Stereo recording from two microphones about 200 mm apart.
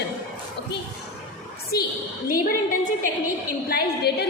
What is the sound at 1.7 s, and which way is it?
Speech, 50° left (ahead or behind).